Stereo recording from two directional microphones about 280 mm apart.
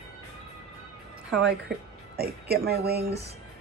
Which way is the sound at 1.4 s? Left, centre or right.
Right.